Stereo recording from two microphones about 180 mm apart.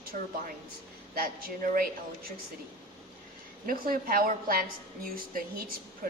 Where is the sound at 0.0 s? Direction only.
55° right (ahead or behind).